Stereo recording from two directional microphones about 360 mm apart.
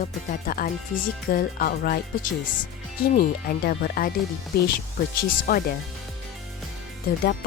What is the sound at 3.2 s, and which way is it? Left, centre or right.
A woman's voice, left.